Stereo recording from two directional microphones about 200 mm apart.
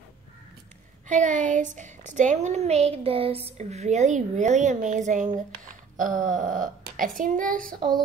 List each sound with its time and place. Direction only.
1.0 s speech: 40° right (ahead or behind)